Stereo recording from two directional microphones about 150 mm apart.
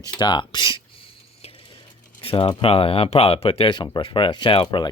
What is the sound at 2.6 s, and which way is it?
Speech, 40° left (ahead or behind).